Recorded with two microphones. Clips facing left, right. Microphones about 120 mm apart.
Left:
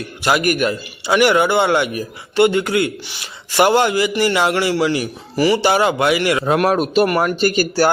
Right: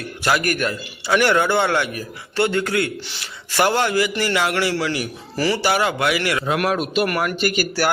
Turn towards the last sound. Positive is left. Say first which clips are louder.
# left 5 dB
turn(degrees=30)  # may be behind; listen again after turning